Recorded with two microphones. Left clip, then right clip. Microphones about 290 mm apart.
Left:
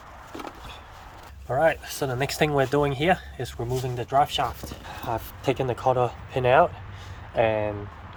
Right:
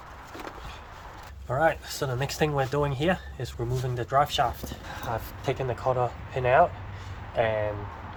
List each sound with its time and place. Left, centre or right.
1.5 s speech: centre
5.0 s speech: left